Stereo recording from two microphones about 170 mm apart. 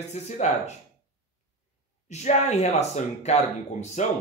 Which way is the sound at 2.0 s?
40° left (ahead or behind).